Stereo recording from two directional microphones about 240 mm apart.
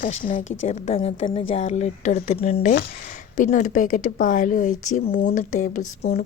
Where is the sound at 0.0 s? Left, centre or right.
Left.